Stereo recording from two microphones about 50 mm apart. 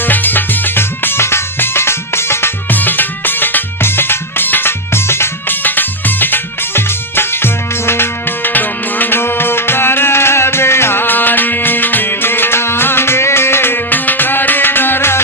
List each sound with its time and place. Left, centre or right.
0.0 s music: left
2.7 s music: left
5.6 s music: left
8.4 s music: left